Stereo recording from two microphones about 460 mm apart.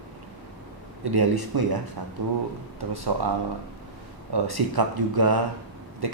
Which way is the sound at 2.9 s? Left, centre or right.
Right.